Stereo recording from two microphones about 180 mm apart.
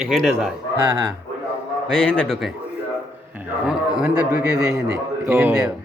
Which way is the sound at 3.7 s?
5° right (ahead or behind).